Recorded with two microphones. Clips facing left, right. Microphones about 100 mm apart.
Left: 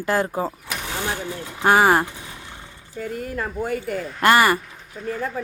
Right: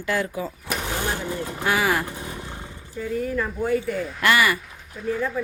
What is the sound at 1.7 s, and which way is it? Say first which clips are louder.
Speech: left 7 dB; 40° left (ahead or behind).